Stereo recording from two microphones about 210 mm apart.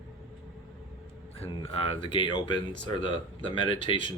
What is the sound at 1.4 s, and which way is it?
Speech, 30° left (ahead or behind).